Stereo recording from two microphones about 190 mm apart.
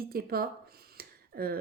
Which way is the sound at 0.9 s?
50° right (ahead or behind).